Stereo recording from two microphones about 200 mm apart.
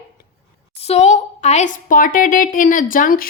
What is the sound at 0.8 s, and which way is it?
A woman's voice, 30° left (ahead or behind).